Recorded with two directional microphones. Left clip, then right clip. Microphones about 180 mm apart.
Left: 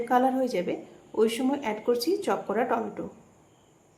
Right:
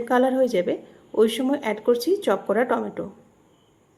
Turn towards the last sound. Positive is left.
turn(degrees=-25)  # may be behind; listen again after turning